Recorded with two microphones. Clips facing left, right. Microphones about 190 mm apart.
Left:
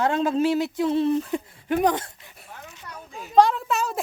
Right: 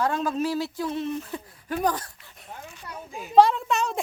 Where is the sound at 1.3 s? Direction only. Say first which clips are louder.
Left 7 dB; 20° left (ahead or behind).